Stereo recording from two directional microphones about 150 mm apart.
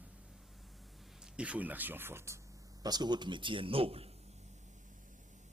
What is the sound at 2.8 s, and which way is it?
Speech, 30° right (ahead or behind).